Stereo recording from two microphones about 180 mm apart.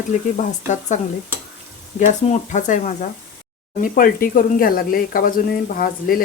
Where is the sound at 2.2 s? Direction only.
40° left (ahead or behind).